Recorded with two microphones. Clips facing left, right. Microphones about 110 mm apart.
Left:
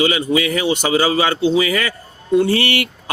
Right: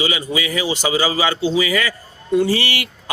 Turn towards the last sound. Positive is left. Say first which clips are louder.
# left 5 dB
turn(degrees=55)  # may be behind; listen again after turning